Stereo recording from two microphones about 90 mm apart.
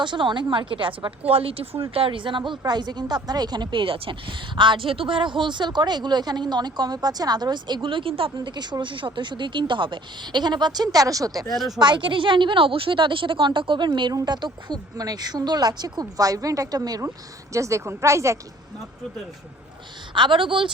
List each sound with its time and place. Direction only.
0.0 s a woman's voice: 60° right (ahead or behind)
1.3 s a woman's voice: 90° right
8.4 s a woman's voice: 55° right (ahead or behind)
11.4 s speech: centre (ahead or behind)
11.8 s a woman's voice: 60° right (ahead or behind); by 18.3 s 35° right (ahead or behind)
20.1 s a woman's voice: 65° right (ahead or behind)